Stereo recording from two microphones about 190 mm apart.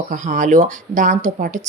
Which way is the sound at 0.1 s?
40° right (ahead or behind).